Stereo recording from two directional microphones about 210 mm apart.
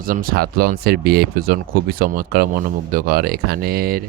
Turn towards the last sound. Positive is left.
turn(degrees=-45)  # may be behind; listen again after turning